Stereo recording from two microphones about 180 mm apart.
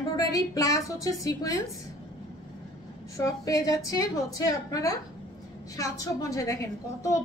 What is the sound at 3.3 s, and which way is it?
A woman's voice, 20° left (ahead or behind).